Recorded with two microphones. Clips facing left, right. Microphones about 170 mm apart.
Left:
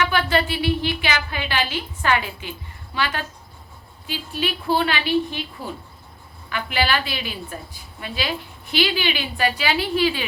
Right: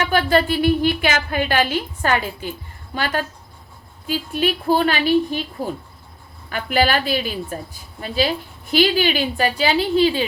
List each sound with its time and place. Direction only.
0.0 s a woman's voice: 40° right (ahead or behind)